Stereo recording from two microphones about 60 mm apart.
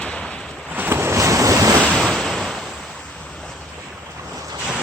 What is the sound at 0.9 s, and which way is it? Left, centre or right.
Waves, right.